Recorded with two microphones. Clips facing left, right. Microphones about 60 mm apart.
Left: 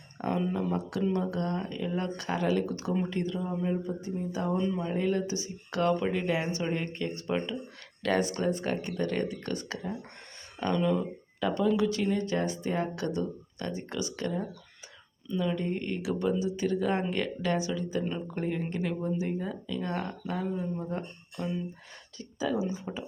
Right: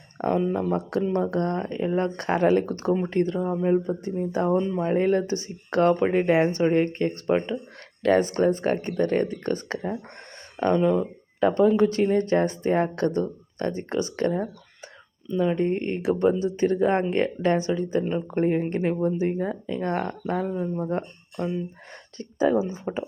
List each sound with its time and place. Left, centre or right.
0.2 s speech: right